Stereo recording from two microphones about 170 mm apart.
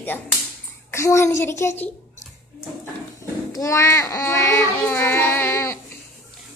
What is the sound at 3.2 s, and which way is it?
Speech, 20° left (ahead or behind).